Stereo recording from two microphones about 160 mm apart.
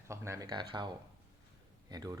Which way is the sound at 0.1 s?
20° right (ahead or behind).